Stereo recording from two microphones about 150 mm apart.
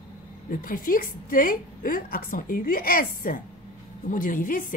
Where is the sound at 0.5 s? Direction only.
70° left (ahead or behind).